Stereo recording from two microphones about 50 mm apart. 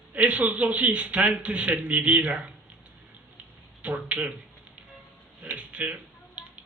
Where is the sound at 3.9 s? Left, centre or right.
Right.